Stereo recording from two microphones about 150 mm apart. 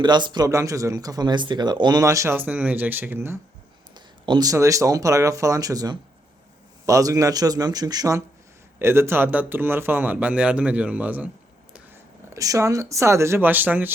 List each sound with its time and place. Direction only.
0.0 s speech: 30° right (ahead or behind); by 3.3 s 15° right (ahead or behind)
3.9 s speech: 30° right (ahead or behind); by 11.3 s 10° right (ahead or behind)
12.3 s speech: 20° right (ahead or behind)